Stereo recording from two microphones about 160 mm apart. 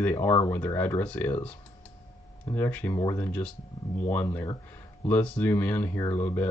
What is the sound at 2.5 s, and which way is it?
Speech, 10° left (ahead or behind).